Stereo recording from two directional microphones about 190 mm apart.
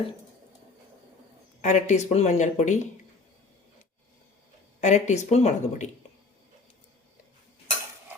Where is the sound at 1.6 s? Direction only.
40° left (ahead or behind).